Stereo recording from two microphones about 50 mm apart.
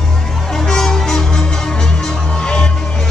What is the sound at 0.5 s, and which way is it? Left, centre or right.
Music, centre.